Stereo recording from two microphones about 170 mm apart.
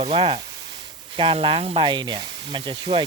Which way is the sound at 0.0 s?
30° right (ahead or behind).